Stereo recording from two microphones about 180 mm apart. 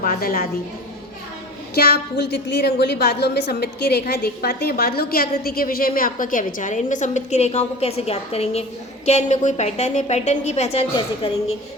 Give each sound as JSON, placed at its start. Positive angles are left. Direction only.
{"t": 0.0, "sound": "a woman's voice", "side_deg": 50}
{"t": 1.7, "sound": "a woman's voice", "side_deg": 60}